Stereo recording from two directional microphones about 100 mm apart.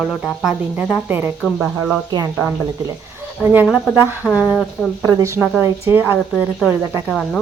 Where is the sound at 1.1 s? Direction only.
20° right (ahead or behind).